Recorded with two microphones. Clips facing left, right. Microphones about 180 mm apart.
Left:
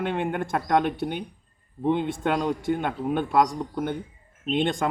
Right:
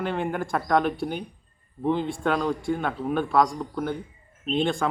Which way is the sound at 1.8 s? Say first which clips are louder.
Left 1 dB; 20° left (ahead or behind).